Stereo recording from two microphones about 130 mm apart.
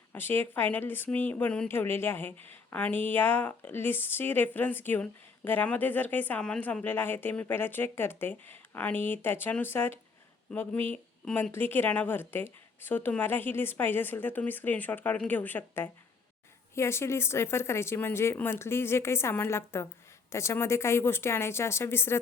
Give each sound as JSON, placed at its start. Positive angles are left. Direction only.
{"t": 0.1, "sound": "a woman's voice", "side_deg": 15}